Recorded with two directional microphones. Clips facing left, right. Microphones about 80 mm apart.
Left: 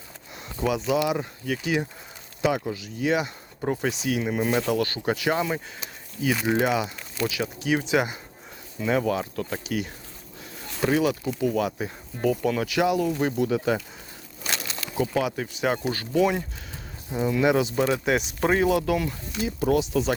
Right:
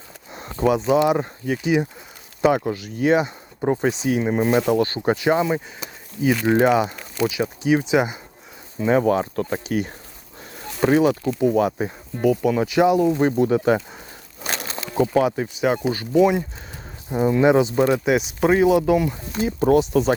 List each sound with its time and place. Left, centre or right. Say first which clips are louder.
0.5 s speech: right 6 dB; right
1.5 s speech: right 5 dB; right
2.4 s speech: right 6 dB; right
3.2 s speech: right 6 dB; right
6.5 s speech: right 7 dB; right
7.2 s speech: right 5 dB; right
12.1 s speech: right 5 dB; centre
12.5 s speech: right 6 dB; right
14.4 s a sound: right 3 dB; right
15.0 s speech: right 7 dB; right
15.4 s speech: right 5 dB; centre
17.1 s speech: right 5 dB; right; by 18.7 s centre
18.7 s speech: right 6 dB; centre
19.3 s speech: right 6 dB; right